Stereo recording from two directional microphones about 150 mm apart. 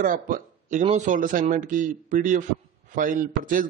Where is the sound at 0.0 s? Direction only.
60° right (ahead or behind).